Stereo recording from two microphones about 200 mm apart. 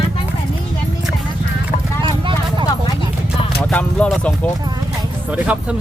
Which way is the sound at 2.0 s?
25° right (ahead or behind).